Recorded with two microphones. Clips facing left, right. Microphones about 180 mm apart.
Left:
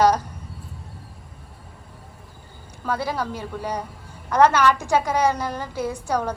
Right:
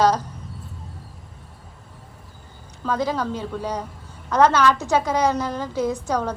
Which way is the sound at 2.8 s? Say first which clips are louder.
Right 2 dB; 10° left (ahead or behind).